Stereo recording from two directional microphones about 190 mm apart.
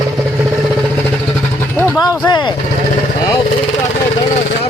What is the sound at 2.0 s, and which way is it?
Speech, 25° left (ahead or behind).